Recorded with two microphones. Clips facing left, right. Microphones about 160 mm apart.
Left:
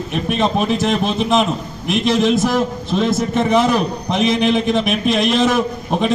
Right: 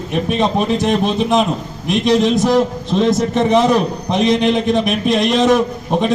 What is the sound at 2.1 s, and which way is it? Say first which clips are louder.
Speech: right 2 dB; 5° left (ahead or behind).